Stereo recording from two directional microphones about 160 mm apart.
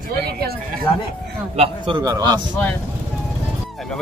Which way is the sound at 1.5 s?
35° right (ahead or behind).